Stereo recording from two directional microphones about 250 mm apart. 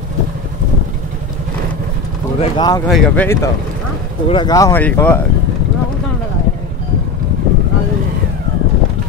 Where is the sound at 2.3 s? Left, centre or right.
Left.